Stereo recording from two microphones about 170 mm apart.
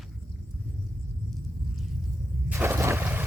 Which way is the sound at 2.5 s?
15° right (ahead or behind).